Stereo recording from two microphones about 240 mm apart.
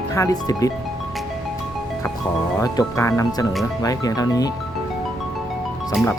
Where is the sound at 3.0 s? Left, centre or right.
Centre.